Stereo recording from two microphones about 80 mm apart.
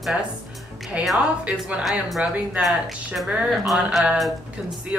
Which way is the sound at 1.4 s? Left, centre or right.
Centre.